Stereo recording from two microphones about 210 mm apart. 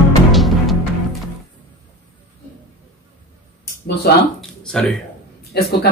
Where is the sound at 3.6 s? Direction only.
50° left (ahead or behind).